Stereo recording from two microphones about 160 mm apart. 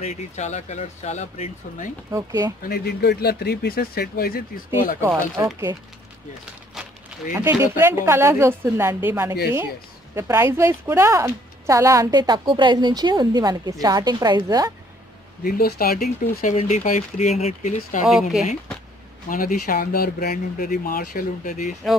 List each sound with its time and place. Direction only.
0.0 s speech: 45° left (ahead or behind)
2.0 s speech: 20° right (ahead or behind)
2.6 s speech: 80° left
5.0 s speech: 20° right (ahead or behind)
7.3 s a woman's voice: 15° right (ahead or behind)
15.4 s speech: 65° left (ahead or behind)
16.4 s speech: 45° left (ahead or behind)
19.2 s speech: 60° left (ahead or behind)